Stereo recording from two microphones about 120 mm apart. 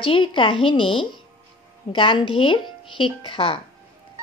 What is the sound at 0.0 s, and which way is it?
A woman's voice, 45° left (ahead or behind).